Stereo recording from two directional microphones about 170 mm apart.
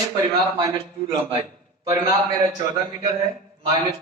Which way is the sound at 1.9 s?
20° right (ahead or behind).